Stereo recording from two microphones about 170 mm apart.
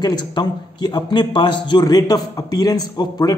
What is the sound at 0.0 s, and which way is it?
A man's voice, 25° left (ahead or behind).